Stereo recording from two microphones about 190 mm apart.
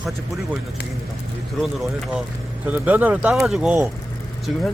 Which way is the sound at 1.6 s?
Centre (ahead or behind).